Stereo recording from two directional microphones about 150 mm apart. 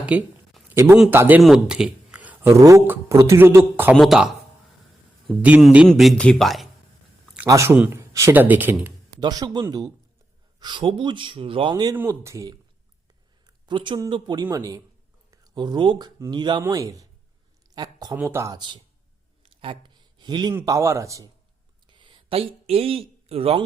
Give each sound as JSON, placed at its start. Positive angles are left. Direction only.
{"t": 0.0, "sound": "a sound", "side_deg": -10}
{"t": 1.1, "sound": "speech", "side_deg": -15}
{"t": 1.4, "sound": "a sound", "side_deg": -5}
{"t": 2.5, "sound": "speech", "side_deg": -20}
{"t": 3.9, "sound": "speech", "side_deg": 0}
{"t": 5.4, "sound": "speech", "side_deg": -5}
{"t": 7.4, "sound": "speech", "side_deg": -20}
{"t": 9.2, "sound": "speech", "side_deg": -25}
{"t": 11.7, "sound": "speech", "side_deg": -25}
{"t": 13.7, "sound": "speech", "side_deg": -30}
{"t": 18.2, "sound": "speech", "side_deg": -15}
{"t": 19.4, "sound": "a sound", "side_deg": -35}
{"t": 20.5, "sound": "speech", "side_deg": -20}
{"t": 21.8, "sound": "a sound", "side_deg": -30}